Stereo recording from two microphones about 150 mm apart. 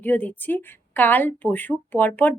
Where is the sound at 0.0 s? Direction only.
10° left (ahead or behind).